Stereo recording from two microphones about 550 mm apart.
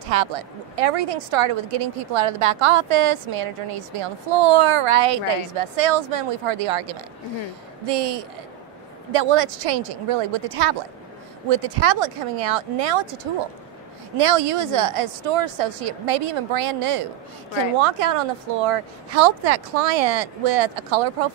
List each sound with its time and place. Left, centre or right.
0.1 s a woman's voice: right
14.1 s a woman's voice: right
17.7 s speech: right